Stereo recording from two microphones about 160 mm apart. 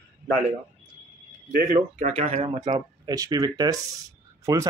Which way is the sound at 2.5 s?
25° right (ahead or behind).